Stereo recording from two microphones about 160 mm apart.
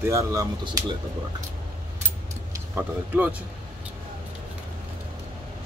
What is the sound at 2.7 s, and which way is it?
Speech, 10° right (ahead or behind).